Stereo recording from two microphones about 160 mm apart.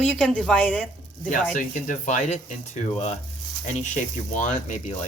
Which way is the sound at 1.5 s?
55° left (ahead or behind).